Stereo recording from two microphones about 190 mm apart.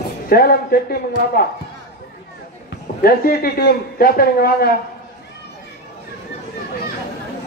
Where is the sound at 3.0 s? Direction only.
50° left (ahead or behind).